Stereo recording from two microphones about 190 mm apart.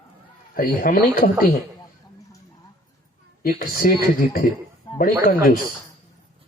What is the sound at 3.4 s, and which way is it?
Speech, 50° left (ahead or behind).